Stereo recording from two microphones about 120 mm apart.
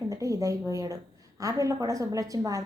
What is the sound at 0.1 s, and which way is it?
A woman's voice, 30° right (ahead or behind).